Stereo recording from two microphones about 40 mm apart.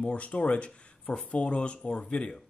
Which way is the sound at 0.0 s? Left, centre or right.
Left.